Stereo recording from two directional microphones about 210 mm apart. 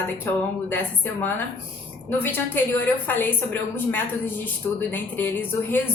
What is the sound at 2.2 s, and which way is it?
A woman's voice, 10° left (ahead or behind).